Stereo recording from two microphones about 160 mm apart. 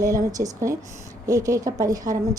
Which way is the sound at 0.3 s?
20° right (ahead or behind).